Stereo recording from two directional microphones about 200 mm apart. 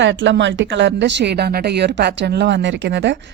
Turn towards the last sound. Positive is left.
turn(degrees=-60)  # may be behind; listen again after turning